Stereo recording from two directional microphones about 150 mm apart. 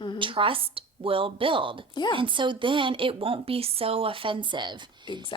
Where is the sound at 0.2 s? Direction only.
35° right (ahead or behind).